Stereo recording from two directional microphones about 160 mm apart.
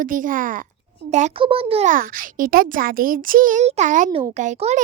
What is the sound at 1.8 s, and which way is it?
A child's voice, 60° right (ahead or behind).